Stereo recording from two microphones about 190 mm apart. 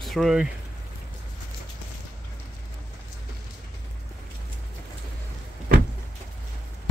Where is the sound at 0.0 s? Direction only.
Centre (ahead or behind).